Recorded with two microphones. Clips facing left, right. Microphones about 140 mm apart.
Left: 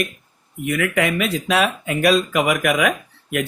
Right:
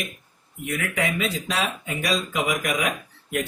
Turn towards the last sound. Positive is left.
turn(degrees=70)  # may be behind; listen again after turning